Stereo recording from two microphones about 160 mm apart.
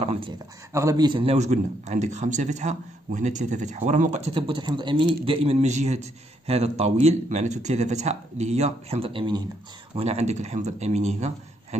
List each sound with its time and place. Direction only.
0.0 s a man's voice: 35° right (ahead or behind)
0.7 s a man's voice: 25° right (ahead or behind)
1.3 s a man's voice: 45° right (ahead or behind)